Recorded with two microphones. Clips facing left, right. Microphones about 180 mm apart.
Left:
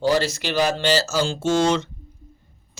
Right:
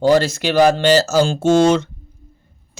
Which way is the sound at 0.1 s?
50° right (ahead or behind).